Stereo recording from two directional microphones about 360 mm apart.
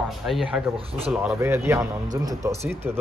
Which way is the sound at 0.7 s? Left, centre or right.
Centre.